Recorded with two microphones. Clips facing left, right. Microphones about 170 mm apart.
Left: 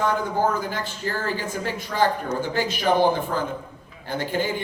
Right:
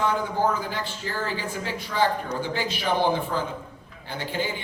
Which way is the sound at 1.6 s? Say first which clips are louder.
Left 2 dB; 45° left (ahead or behind).